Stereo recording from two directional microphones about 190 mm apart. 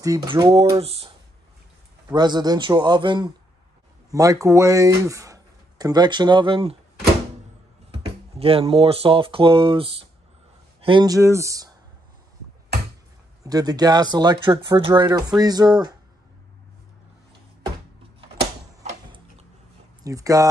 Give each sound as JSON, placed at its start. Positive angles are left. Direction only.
{"t": 0.0, "sound": "speech", "side_deg": -20}
{"t": 0.7, "sound": "speech", "side_deg": -30}
{"t": 2.1, "sound": "speech", "side_deg": -20}
{"t": 8.4, "sound": "speech", "side_deg": -30}
{"t": 13.4, "sound": "speech", "side_deg": -20}
{"t": 18.4, "sound": "tick-tock", "side_deg": -30}
{"t": 20.0, "sound": "speech", "side_deg": -15}